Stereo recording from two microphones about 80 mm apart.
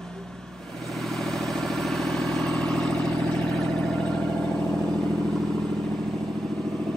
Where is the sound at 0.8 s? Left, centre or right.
Centre.